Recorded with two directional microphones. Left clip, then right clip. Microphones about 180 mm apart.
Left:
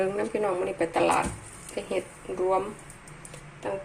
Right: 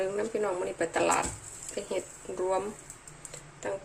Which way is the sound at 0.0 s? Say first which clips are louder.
Left 3 dB; centre (ahead or behind).